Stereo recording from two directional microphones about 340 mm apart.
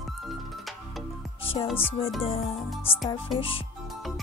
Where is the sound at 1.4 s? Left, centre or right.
Centre.